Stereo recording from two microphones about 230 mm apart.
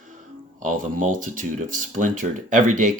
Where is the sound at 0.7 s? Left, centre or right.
Right.